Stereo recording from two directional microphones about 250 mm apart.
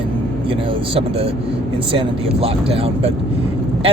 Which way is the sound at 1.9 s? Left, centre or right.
Right.